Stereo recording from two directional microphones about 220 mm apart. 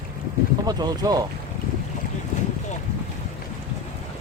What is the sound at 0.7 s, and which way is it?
Speech, 20° right (ahead or behind).